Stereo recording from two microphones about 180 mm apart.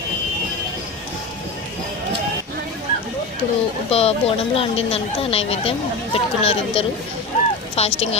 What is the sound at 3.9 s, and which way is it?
Speech, 35° left (ahead or behind).